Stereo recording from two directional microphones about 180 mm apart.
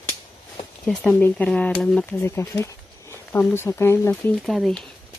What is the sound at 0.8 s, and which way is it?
Speech, 5° left (ahead or behind).